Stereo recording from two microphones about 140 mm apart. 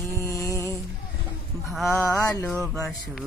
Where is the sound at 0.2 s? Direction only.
20° left (ahead or behind).